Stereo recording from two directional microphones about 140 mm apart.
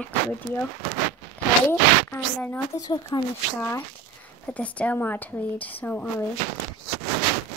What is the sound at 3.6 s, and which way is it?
A woman's voice, 15° left (ahead or behind).